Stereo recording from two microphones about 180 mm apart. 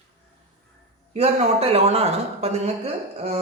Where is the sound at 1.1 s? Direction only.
35° right (ahead or behind).